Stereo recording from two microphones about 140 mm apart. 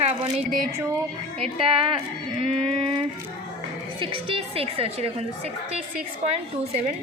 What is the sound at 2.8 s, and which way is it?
Music, 35° right (ahead or behind).